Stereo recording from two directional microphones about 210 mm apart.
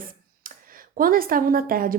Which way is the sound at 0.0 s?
40° right (ahead or behind).